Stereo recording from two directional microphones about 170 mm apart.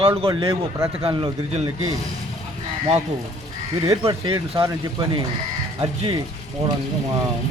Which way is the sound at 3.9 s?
30° right (ahead or behind).